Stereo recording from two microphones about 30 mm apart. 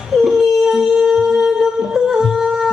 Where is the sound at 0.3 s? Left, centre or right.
Centre.